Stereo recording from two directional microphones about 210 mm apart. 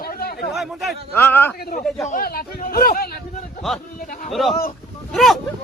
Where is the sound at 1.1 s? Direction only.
10° left (ahead or behind).